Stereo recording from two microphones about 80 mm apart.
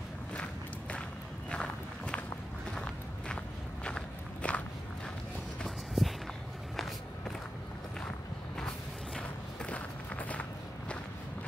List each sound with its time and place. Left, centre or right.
1.5 s walk: centre
6.0 s walk: centre
8.5 s walk: centre